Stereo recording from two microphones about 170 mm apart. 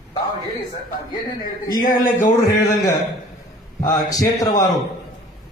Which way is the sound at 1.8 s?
55° left (ahead or behind).